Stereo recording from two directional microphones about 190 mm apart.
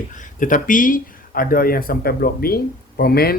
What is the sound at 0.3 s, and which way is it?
Speech, 45° left (ahead or behind).